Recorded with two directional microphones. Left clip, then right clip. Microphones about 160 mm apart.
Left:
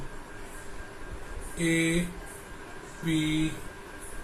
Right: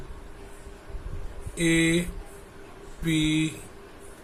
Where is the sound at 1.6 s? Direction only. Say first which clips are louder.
Right 4 dB; 50° right (ahead or behind).